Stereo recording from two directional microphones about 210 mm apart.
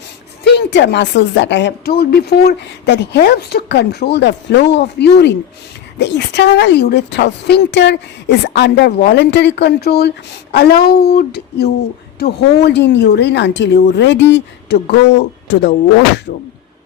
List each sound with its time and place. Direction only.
0.4 s speech: 55° left (ahead or behind)